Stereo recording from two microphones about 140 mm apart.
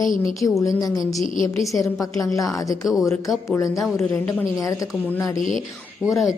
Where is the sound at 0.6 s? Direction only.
25° left (ahead or behind).